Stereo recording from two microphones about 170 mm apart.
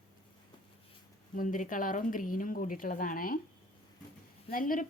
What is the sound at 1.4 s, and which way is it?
A woman's voice, 50° left (ahead or behind).